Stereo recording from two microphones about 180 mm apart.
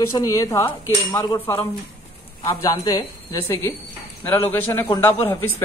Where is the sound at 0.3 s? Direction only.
15° left (ahead or behind).